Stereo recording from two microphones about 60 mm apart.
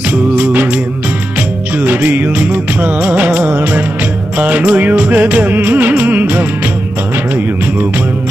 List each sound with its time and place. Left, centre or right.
0.1 s music: right
1.8 s music: right